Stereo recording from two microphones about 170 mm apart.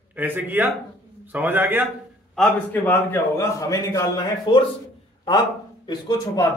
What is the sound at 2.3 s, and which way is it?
A man's voice, 10° left (ahead or behind).